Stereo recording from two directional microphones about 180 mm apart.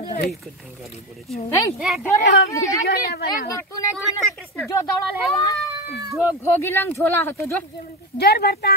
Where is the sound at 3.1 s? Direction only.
60° left (ahead or behind).